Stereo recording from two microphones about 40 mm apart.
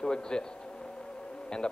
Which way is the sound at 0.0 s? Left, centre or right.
Centre.